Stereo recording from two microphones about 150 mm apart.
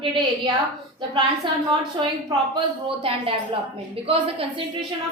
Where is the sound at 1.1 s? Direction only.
35° right (ahead or behind).